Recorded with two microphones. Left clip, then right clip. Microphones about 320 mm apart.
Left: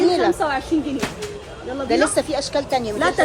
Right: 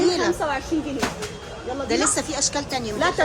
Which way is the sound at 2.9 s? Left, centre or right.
Left.